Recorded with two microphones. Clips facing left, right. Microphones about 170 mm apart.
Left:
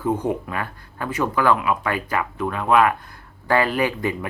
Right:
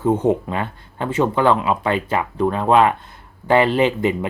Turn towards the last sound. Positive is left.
turn(degrees=-20)  # may be behind; listen again after turning